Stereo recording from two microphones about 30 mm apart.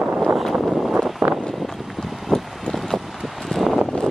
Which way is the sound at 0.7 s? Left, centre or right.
Centre.